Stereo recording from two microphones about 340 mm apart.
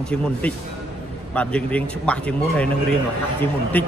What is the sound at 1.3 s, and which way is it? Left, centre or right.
Speech, centre.